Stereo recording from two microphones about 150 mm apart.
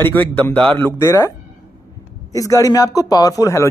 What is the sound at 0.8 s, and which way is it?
Speech, 20° left (ahead or behind).